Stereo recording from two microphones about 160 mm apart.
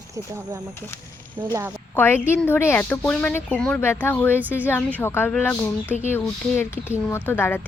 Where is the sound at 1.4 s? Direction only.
20° right (ahead or behind).